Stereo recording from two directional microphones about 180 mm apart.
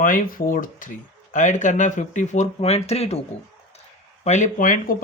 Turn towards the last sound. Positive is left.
turn(degrees=50)  # may be behind; listen again after turning